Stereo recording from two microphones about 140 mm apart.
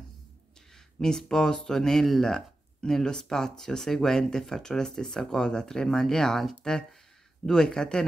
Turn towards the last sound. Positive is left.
turn(degrees=5)  # may be behind; listen again after turning